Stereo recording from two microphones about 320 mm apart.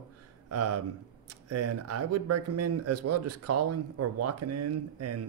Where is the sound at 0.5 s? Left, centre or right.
Right.